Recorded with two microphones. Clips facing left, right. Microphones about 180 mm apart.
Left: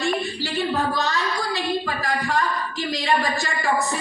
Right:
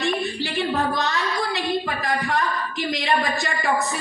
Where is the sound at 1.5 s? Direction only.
20° right (ahead or behind).